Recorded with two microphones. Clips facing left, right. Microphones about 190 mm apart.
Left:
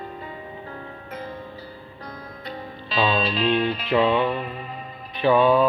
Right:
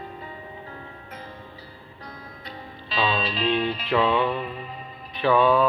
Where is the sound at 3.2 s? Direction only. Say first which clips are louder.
Left 3 dB; 55° left (ahead or behind).